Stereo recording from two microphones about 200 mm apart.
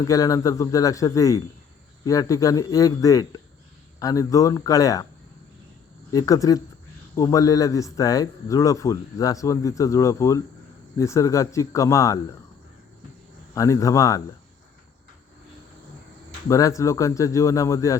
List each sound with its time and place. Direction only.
0.0 s a man's voice: 15° left (ahead or behind)
6.1 s a man's voice: 15° left (ahead or behind)
13.5 s a man's voice: 15° left (ahead or behind)
16.5 s a man's voice: 15° left (ahead or behind)